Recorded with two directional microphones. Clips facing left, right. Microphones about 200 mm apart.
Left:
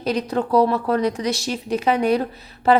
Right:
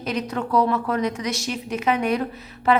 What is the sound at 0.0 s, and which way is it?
Speech, 35° left (ahead or behind).